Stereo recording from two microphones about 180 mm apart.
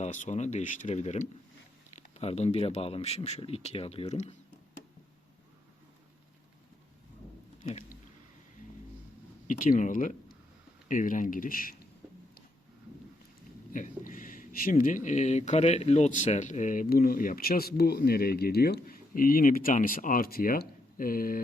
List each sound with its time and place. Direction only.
0.0 s a man's voice: 40° left (ahead or behind)
7.6 s a sound: 40° left (ahead or behind)
9.5 s speech: 45° left (ahead or behind)
13.7 s speech: 45° left (ahead or behind)